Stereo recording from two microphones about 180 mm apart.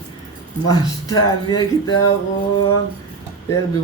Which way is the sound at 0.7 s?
20° left (ahead or behind).